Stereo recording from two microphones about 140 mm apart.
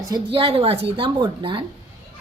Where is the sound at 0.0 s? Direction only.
30° right (ahead or behind).